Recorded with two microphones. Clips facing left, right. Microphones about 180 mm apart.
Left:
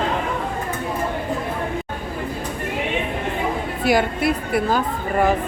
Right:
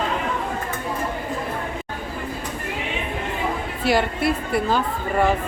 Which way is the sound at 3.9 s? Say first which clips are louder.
Left 1 dB; centre (ahead or behind).